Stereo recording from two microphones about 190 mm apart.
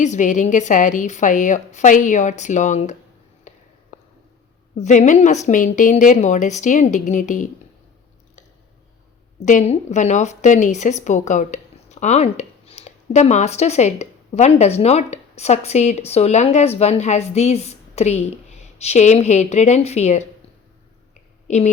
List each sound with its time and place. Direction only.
0.0 s a woman's voice: 40° left (ahead or behind)
3.5 s a sound: 40° left (ahead or behind)
4.8 s a woman's voice: 40° left (ahead or behind)
9.4 s a woman's voice: 40° left (ahead or behind)
21.4 s speech: 35° left (ahead or behind)